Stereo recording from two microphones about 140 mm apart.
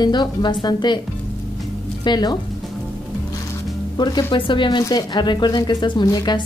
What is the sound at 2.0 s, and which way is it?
Speech, 30° left (ahead or behind).